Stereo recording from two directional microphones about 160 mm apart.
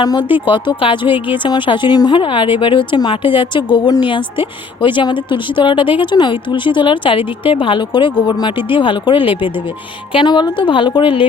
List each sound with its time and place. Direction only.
0.0 s a woman's voice: 25° left (ahead or behind)